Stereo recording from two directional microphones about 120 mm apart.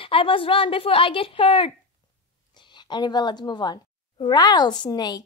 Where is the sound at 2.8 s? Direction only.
40° left (ahead or behind).